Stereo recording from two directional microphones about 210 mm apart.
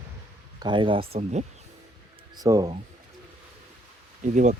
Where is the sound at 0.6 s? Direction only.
25° right (ahead or behind).